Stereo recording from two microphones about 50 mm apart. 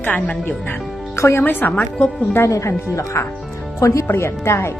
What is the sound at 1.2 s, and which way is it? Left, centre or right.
Speech, left.